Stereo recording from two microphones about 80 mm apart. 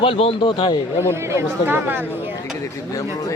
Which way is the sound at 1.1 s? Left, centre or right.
Right.